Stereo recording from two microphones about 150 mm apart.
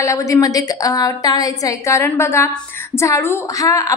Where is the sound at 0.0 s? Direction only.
20° left (ahead or behind).